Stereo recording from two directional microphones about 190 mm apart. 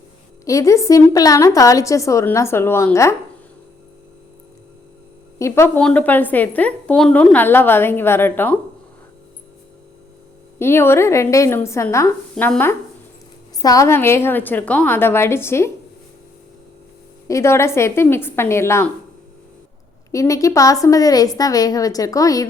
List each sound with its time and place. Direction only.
0.4 s speech: 15° left (ahead or behind)
5.4 s speech: 15° left (ahead or behind)
10.6 s speech: 10° left (ahead or behind)
17.2 s speech: 15° left (ahead or behind)
20.1 s speech: 15° left (ahead or behind)